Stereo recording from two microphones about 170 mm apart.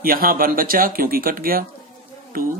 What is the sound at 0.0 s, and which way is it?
Speech, 60° right (ahead or behind).